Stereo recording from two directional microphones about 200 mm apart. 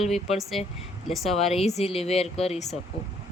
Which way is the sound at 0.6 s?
35° left (ahead or behind).